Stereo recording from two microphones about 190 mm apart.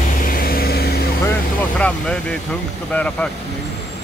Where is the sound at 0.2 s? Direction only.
50° left (ahead or behind).